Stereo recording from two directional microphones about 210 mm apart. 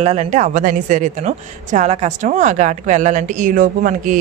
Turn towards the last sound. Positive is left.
turn(degrees=-40)  # may be behind; listen again after turning